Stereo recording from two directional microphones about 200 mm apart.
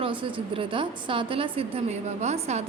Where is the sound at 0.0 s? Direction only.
25° right (ahead or behind).